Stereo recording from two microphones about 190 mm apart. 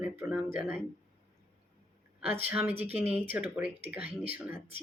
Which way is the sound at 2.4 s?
10° right (ahead or behind).